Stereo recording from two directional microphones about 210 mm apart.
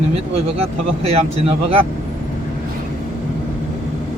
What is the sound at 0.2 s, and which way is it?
Speech, 30° right (ahead or behind).